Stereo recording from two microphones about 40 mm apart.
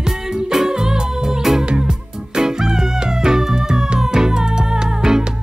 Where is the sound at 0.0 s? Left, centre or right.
Centre.